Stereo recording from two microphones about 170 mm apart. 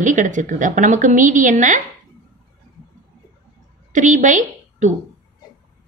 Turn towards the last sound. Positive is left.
turn(degrees=-45)  # may be behind; listen again after turning